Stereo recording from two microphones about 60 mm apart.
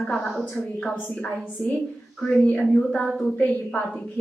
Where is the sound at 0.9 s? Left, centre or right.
Left.